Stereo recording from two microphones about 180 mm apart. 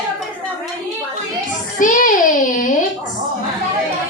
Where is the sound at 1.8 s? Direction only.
50° left (ahead or behind).